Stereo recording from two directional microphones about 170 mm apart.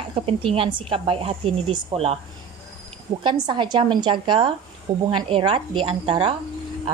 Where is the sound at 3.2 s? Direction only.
25° right (ahead or behind).